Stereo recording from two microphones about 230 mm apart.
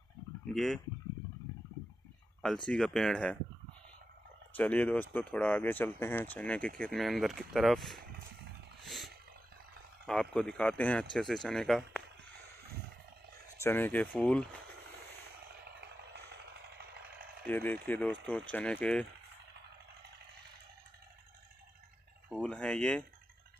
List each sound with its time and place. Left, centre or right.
0.5 s speech: centre
2.4 s speech: centre
4.6 s speech: centre
8.8 s a sound: centre
10.3 s speech: centre
13.6 s speech: centre
16.7 s a sound: right
17.5 s speech: centre
22.3 s a sound: centre